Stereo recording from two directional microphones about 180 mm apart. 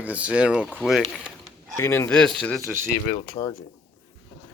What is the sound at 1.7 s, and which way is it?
Speech, 15° left (ahead or behind).